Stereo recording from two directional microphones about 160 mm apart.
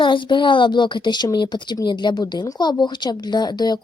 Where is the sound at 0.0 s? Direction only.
30° left (ahead or behind).